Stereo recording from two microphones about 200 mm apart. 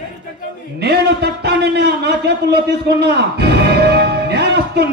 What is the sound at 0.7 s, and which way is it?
A man's voice, 55° right (ahead or behind).